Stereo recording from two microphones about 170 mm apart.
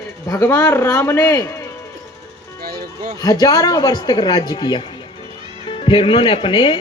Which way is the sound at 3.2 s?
20° left (ahead or behind).